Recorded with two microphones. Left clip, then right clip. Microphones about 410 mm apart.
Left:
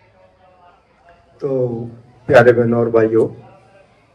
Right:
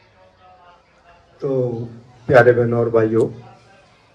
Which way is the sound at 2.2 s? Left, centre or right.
Left.